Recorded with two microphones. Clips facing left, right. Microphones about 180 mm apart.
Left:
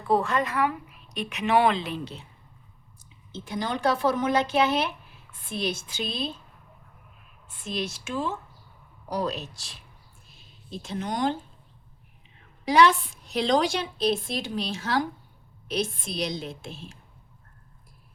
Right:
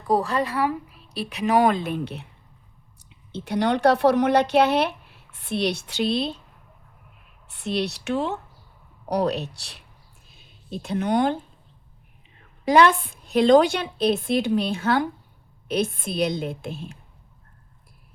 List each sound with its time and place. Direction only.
0.1 s a woman's voice: 35° right (ahead or behind); by 6.4 s 65° right (ahead or behind)
7.4 s a woman's voice: 70° right (ahead or behind)
12.6 s a woman's voice: 55° right (ahead or behind)